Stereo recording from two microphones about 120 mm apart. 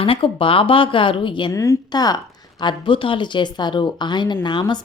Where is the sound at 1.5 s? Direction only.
25° left (ahead or behind).